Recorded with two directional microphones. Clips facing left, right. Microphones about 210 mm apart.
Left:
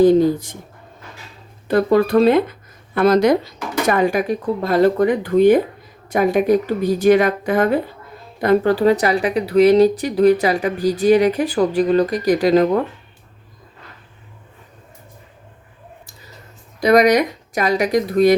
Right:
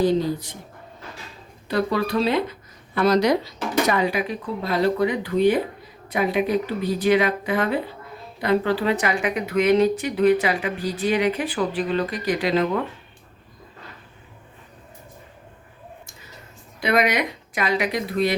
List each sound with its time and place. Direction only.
0.0 s speech: 50° left (ahead or behind)
1.6 s speech: 50° left (ahead or behind)
16.8 s speech: 40° left (ahead or behind)